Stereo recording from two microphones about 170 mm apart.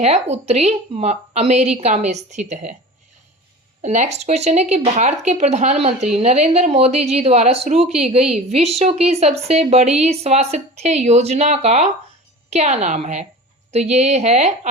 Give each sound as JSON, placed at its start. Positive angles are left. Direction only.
{"t": 0.0, "sound": "a woman's voice", "side_deg": -40}
{"t": 3.8, "sound": "speech", "side_deg": -45}